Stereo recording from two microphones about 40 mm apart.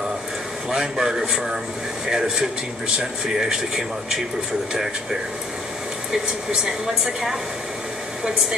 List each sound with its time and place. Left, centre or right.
0.7 s speech: centre
6.2 s speech: right